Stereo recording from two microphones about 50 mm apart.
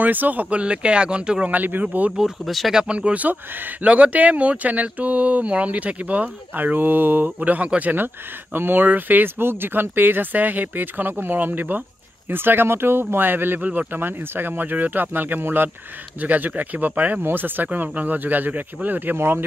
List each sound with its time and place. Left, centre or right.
0.0 s speech: right; by 1.5 s centre
1.5 s speech: right
2.4 s speech: centre
2.7 s speech: centre; by 3.7 s right
3.8 s speech: right
13.6 s speech: right
13.9 s speech: right
19.1 s speech: right